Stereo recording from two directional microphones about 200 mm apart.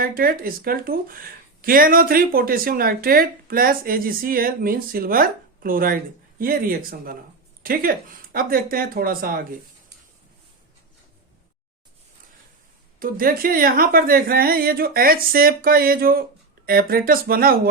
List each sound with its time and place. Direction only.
0.0 s speech: 45° right (ahead or behind)
13.0 s speech: 45° right (ahead or behind)